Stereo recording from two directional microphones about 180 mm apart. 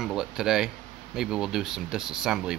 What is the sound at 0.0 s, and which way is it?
Speech, 5° right (ahead or behind).